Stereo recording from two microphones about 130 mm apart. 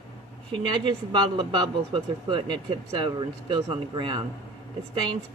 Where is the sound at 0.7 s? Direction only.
40° right (ahead or behind).